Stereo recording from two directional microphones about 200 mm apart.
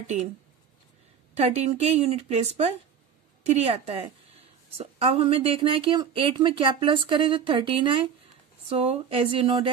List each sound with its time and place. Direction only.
0.0 s speech: 35° right (ahead or behind)
1.3 s speech: 30° right (ahead or behind)